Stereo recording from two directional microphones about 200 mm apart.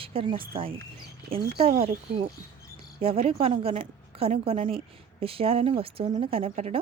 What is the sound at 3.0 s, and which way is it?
A woman's voice, 30° right (ahead or behind).